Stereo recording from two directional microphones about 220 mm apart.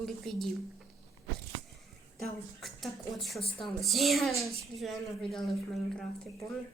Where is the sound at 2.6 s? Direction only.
Centre (ahead or behind).